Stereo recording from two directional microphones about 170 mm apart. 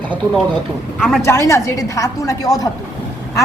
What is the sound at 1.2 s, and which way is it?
A woman's voice, 15° left (ahead or behind).